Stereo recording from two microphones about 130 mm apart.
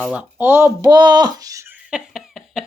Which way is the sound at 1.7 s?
5° right (ahead or behind).